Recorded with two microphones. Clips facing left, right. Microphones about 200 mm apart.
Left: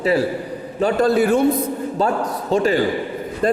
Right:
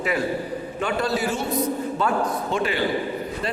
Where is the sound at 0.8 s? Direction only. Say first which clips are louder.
Left 8 dB; 35° left (ahead or behind).